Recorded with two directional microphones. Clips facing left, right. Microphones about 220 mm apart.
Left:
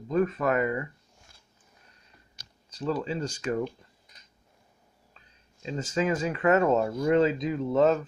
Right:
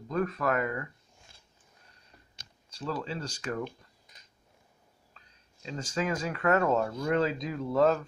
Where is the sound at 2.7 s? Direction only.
20° left (ahead or behind).